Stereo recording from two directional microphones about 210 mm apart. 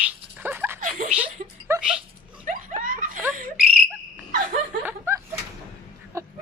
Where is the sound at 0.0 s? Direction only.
10° right (ahead or behind).